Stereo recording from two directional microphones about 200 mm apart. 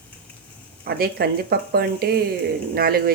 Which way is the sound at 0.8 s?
50° right (ahead or behind).